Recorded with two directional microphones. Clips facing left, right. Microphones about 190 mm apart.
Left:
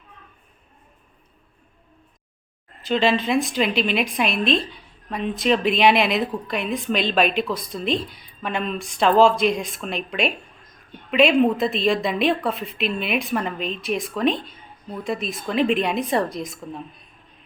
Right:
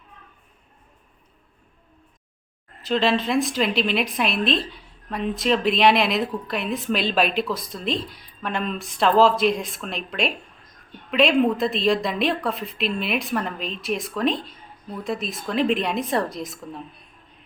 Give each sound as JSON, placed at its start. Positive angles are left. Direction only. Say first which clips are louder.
{"t": 2.8, "sound": "a woman's voice", "louder": "left 1 dB", "side_deg": 0}